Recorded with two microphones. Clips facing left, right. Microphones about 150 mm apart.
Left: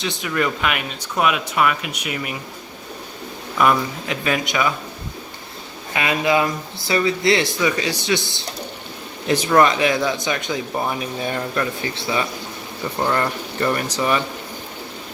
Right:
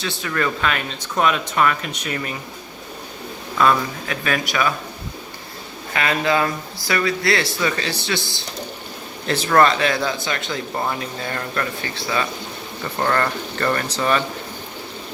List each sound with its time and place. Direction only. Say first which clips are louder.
0.0 s speech: left 1 dB; 20° left (ahead or behind)
3.6 s speech: even; 20° left (ahead or behind)
5.9 s speech: left 1 dB; 15° left (ahead or behind)